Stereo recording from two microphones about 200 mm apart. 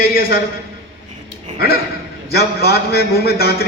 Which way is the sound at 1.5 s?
50° left (ahead or behind).